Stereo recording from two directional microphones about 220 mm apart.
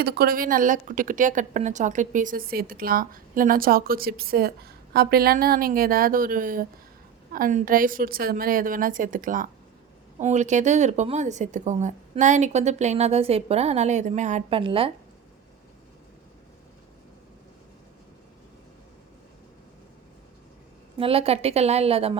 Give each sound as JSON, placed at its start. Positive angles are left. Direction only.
{"t": 0.0, "sound": "speech", "side_deg": -45}
{"t": 21.0, "sound": "a woman's voice", "side_deg": -25}